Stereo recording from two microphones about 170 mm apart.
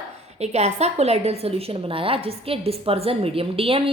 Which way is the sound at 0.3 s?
40° right (ahead or behind).